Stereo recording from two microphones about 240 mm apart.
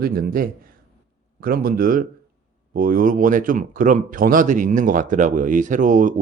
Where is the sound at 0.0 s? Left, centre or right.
Right.